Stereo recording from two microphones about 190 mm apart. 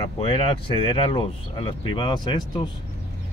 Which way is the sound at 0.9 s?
25° left (ahead or behind).